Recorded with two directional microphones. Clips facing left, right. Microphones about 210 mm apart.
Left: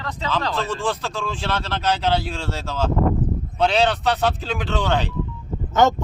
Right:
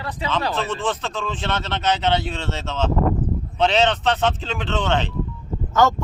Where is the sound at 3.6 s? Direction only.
Centre (ahead or behind).